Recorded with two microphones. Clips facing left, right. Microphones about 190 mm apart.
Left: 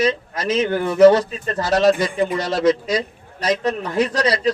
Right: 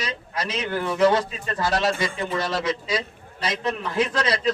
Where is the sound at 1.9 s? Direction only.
15° left (ahead or behind).